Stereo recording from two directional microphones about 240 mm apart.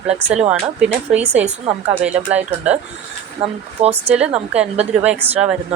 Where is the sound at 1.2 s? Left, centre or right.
Right.